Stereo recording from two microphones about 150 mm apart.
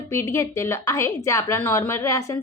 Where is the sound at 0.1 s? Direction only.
20° left (ahead or behind).